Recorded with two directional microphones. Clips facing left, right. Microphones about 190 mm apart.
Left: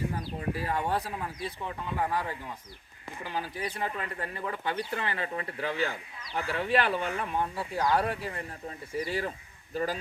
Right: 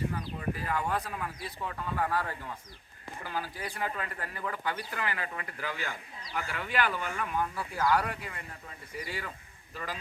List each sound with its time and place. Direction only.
0.2 s speech: 35° left (ahead or behind)